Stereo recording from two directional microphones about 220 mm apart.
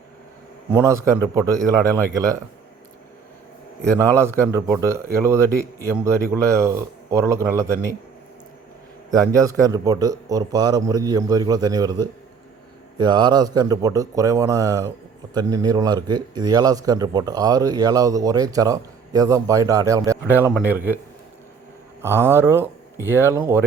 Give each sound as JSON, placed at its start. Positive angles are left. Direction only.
{"t": 0.7, "sound": "a man's voice", "side_deg": -10}
{"t": 3.8, "sound": "a man's voice", "side_deg": -10}
{"t": 9.1, "sound": "a man's voice", "side_deg": -15}
{"t": 22.0, "sound": "a man's voice", "side_deg": -10}